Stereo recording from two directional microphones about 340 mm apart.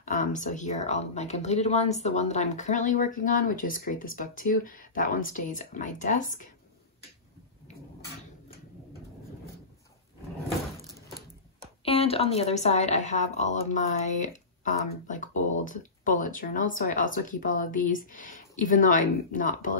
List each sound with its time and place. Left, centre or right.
0.0 s speech: left
11.8 s speech: centre